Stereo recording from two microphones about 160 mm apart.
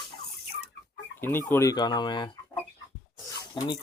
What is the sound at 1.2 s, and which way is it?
Speech, 15° left (ahead or behind).